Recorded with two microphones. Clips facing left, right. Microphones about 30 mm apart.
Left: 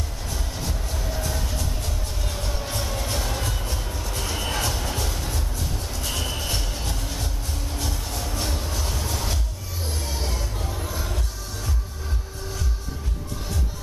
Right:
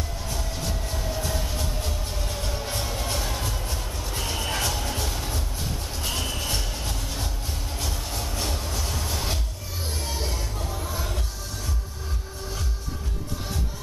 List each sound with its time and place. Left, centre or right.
1.2 s music: centre
4.1 s a sound: centre
4.4 s music: centre
7.8 s vehicle: centre
10.0 s music: centre